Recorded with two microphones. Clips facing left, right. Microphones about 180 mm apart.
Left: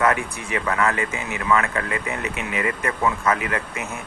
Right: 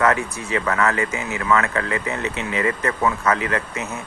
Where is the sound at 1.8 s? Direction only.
25° right (ahead or behind).